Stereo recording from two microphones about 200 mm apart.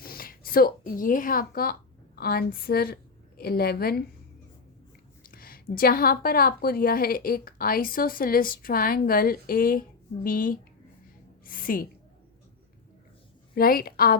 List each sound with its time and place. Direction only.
0.0 s a woman's voice: 45° left (ahead or behind)
5.2 s a woman's voice: 45° left (ahead or behind)
13.6 s a woman's voice: 50° left (ahead or behind)